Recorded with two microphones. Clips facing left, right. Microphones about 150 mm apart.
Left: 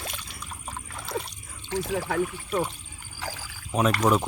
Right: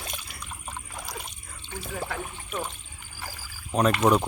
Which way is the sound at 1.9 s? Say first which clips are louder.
Left 4 dB; 90° left.